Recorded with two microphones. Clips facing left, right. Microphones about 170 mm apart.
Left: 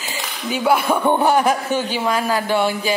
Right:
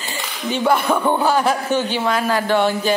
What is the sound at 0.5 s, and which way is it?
Speech, 5° left (ahead or behind).